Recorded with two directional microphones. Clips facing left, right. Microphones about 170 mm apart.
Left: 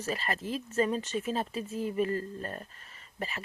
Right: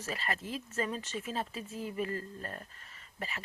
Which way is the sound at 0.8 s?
25° left (ahead or behind).